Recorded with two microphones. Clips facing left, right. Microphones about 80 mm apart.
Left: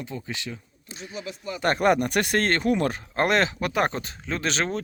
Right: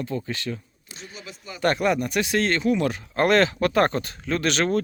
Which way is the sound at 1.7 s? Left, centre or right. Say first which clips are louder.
Left 2 dB; left.